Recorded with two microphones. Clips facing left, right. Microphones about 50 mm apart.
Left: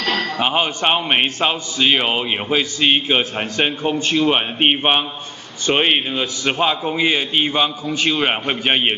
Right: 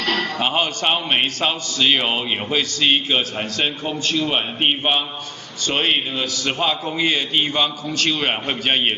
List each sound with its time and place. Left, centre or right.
0.4 s a man's voice: centre